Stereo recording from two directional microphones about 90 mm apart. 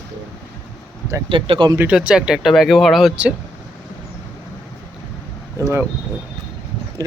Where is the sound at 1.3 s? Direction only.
65° right (ahead or behind).